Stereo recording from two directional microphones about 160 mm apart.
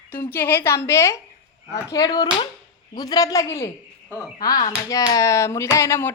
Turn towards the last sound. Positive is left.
turn(degrees=15)  # may be behind; listen again after turning